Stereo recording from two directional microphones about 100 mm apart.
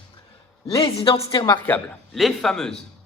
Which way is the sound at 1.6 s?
15° left (ahead or behind).